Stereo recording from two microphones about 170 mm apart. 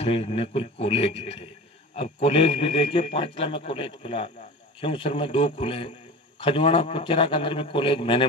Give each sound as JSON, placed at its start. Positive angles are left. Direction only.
{"t": 0.0, "sound": "a man's voice", "side_deg": 35}